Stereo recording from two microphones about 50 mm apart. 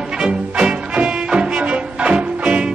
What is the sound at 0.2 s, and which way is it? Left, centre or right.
Music, centre.